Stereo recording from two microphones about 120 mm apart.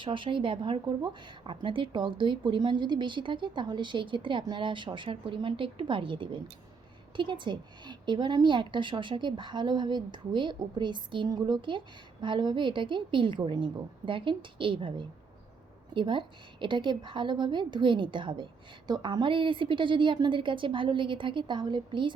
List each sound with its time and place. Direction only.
0.0 s a woman's voice: 45° right (ahead or behind)